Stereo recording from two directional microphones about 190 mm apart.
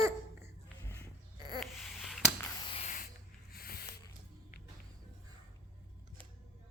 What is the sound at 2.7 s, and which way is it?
Spray, 40° left (ahead or behind).